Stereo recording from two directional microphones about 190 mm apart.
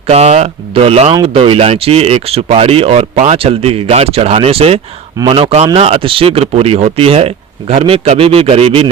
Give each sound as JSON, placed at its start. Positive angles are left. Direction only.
{"t": 0.1, "sound": "speech", "side_deg": -35}